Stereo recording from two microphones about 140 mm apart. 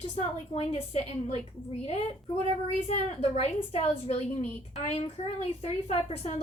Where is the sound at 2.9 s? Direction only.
45° left (ahead or behind).